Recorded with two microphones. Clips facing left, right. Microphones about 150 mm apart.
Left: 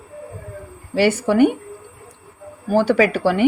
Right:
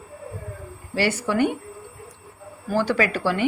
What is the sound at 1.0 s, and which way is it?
Speech, 55° left (ahead or behind).